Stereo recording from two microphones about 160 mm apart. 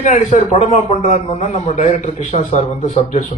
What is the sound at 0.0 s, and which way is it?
A man's voice, 45° left (ahead or behind).